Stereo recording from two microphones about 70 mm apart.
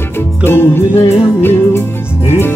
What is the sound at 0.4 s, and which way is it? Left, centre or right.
Music, left.